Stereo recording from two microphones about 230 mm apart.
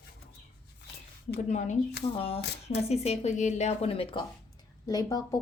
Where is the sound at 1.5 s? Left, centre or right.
Left.